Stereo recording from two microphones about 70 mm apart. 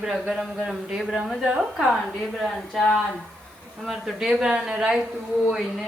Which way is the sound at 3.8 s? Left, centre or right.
Centre.